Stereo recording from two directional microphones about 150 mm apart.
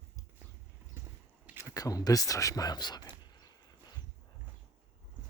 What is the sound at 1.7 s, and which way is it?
Speech, 25° left (ahead or behind).